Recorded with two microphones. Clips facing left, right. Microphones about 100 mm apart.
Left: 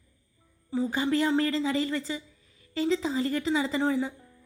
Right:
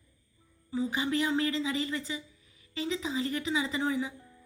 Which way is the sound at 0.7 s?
35° left (ahead or behind).